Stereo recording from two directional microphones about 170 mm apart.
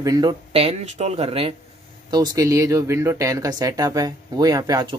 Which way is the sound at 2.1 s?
25° right (ahead or behind).